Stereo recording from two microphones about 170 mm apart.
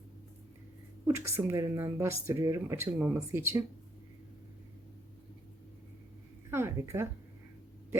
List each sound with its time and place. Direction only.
1.0 s speech: 15° right (ahead or behind)
6.5 s a woman's voice: 15° right (ahead or behind)